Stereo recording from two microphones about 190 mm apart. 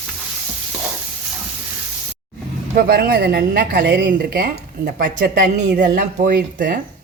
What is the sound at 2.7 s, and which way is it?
Speech, 55° right (ahead or behind).